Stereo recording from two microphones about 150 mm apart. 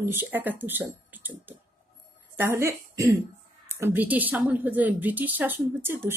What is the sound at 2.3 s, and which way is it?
Speech, 15° right (ahead or behind).